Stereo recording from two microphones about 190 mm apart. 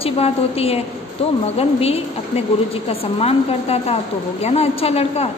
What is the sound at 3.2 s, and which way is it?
A woman's voice, 30° left (ahead or behind).